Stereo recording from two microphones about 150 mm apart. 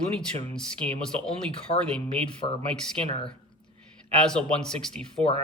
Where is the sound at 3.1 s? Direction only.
35° left (ahead or behind).